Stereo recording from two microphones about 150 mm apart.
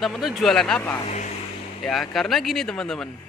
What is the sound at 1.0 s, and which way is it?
Speech, 50° left (ahead or behind).